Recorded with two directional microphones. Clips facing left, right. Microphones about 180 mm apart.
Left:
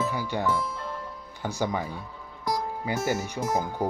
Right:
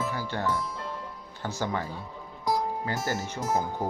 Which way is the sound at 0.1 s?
15° left (ahead or behind).